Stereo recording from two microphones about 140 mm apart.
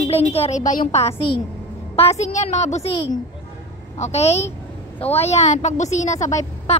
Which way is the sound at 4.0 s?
50° left (ahead or behind).